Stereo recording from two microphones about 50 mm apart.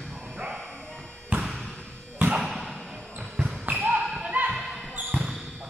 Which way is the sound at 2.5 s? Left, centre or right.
Centre.